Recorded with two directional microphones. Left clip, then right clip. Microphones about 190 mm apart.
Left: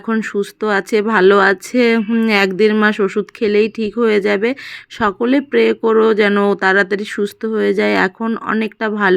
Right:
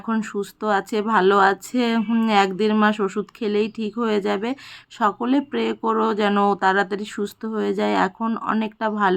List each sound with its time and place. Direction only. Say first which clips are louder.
0.0 s speech: left 7 dB; 15° left (ahead or behind)